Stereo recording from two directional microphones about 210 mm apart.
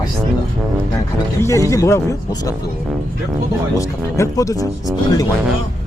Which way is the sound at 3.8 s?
15° left (ahead or behind).